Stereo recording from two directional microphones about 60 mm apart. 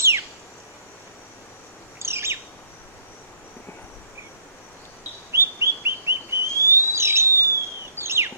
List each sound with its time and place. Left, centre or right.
2.0 s bird: right
5.3 s bird: right